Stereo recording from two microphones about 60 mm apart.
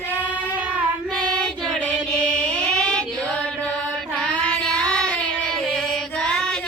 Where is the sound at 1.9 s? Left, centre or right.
Centre.